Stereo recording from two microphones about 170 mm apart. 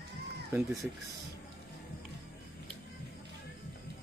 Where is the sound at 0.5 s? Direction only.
20° right (ahead or behind).